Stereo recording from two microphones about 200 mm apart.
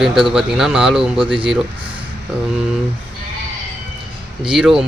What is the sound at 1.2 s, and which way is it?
Speech, 25° right (ahead or behind).